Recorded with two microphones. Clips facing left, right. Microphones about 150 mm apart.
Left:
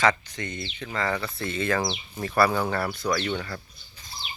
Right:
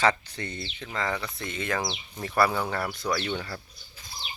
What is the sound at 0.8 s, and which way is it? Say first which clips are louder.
Speech: left 3 dB; 20° right (ahead or behind).